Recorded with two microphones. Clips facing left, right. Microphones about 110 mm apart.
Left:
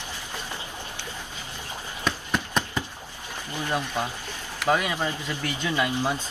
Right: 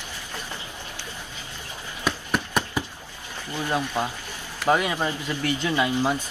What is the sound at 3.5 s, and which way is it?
A man's voice, 15° right (ahead or behind).